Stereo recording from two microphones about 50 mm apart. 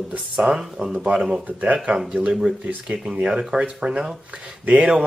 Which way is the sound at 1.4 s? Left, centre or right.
Right.